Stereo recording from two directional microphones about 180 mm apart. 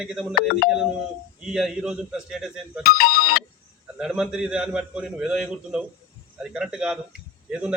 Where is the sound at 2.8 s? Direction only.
60° left (ahead or behind).